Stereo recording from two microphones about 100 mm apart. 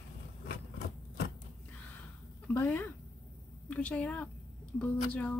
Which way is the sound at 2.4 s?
15° left (ahead or behind).